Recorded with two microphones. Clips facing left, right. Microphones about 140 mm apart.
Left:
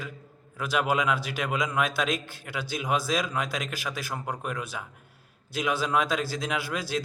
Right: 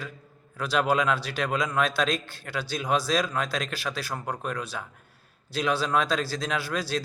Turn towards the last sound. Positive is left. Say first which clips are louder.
# right 1 dB
turn(degrees=20)  # may be behind; listen again after turning